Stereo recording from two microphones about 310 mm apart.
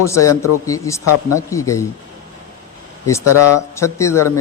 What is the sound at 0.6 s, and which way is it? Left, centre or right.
Speech, centre.